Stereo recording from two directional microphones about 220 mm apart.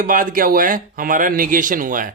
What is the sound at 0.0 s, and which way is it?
A man's voice, 40° right (ahead or behind).